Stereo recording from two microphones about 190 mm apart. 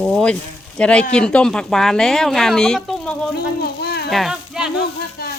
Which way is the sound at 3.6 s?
55° left (ahead or behind).